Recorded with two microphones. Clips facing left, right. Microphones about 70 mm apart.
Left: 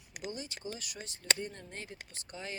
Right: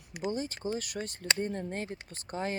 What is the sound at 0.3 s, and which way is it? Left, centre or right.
Speech, right.